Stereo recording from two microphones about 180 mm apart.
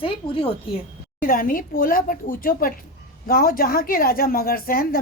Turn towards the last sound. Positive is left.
turn(degrees=55)  # may be behind; listen again after turning